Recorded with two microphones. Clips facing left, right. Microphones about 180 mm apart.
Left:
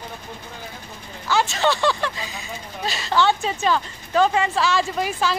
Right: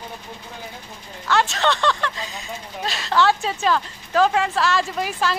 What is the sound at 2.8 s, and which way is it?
A woman's voice, centre (ahead or behind).